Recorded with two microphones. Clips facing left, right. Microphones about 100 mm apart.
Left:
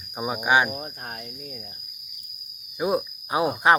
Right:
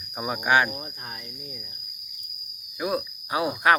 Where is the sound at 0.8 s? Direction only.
45° left (ahead or behind).